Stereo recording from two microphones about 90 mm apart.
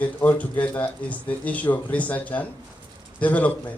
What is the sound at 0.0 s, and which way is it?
Speech, 20° left (ahead or behind).